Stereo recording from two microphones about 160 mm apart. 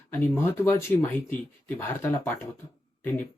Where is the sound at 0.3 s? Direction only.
15° left (ahead or behind).